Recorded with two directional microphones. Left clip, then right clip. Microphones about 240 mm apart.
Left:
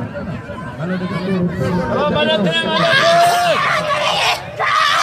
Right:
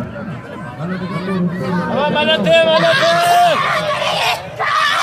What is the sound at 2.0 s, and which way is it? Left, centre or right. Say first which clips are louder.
Speech: right 1 dB; right.